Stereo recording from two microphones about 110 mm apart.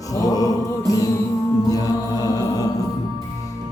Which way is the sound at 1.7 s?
35° left (ahead or behind).